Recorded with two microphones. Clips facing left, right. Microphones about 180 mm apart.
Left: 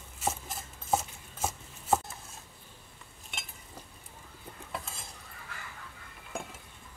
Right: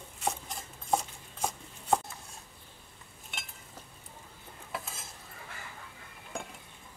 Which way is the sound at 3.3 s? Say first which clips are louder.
Left 1 dB; centre (ahead or behind).